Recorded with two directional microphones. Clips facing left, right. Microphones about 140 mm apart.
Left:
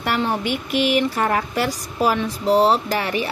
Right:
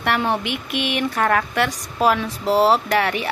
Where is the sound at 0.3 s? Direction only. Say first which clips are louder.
Left 1 dB; centre (ahead or behind).